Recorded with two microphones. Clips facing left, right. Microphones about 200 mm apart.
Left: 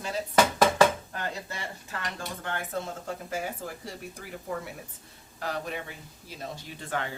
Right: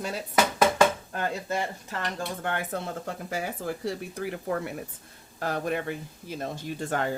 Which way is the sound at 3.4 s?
65° right (ahead or behind).